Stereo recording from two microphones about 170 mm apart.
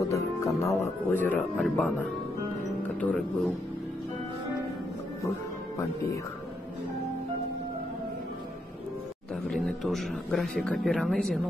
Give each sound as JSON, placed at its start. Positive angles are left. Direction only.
{"t": 0.1, "sound": "music", "side_deg": 15}
{"t": 2.8, "sound": "speech", "side_deg": 10}
{"t": 9.5, "sound": "speech", "side_deg": 0}